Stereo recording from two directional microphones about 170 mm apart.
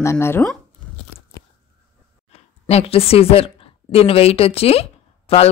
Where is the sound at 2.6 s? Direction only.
35° left (ahead or behind).